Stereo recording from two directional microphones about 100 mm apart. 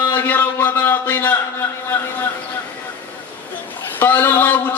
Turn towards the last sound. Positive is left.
turn(degrees=20)  # may be behind; listen again after turning